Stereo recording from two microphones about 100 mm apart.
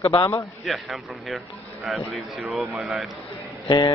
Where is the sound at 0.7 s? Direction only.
Centre (ahead or behind).